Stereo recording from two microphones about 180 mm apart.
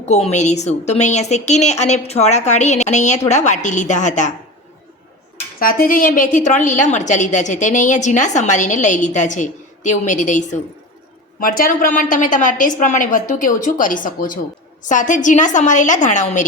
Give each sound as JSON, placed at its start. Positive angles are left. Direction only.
{"t": 0.0, "sound": "a woman's voice", "side_deg": 40}
{"t": 5.5, "sound": "a woman's voice", "side_deg": 55}